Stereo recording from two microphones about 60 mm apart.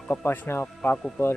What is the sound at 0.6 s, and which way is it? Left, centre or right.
Speech, left.